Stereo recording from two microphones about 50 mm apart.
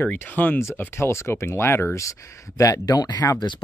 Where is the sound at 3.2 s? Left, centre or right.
Left.